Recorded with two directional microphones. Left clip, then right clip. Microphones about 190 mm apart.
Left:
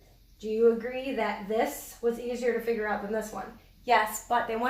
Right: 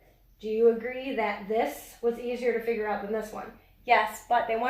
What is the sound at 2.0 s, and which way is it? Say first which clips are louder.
Speech: right 1 dB; 30° left (ahead or behind).